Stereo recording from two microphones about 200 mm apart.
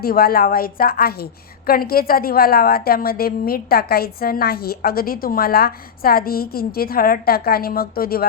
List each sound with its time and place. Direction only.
0.0 s a woman's voice: 50° left (ahead or behind)